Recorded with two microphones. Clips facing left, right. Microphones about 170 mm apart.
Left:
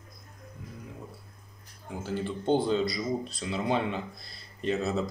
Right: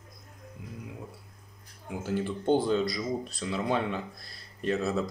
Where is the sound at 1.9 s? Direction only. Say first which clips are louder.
Right 2 dB; 10° right (ahead or behind).